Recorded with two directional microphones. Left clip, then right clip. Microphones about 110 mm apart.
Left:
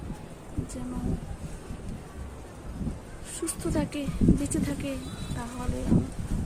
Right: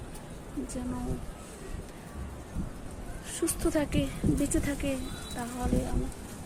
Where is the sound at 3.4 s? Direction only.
60° right (ahead or behind).